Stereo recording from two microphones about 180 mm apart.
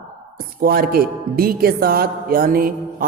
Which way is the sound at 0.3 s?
55° right (ahead or behind).